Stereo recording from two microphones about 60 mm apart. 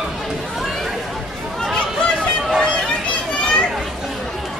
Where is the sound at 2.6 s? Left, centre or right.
Centre.